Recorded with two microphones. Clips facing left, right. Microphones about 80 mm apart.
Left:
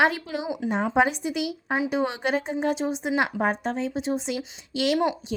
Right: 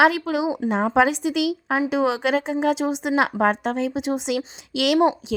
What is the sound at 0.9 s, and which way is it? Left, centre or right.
A woman's voice, right.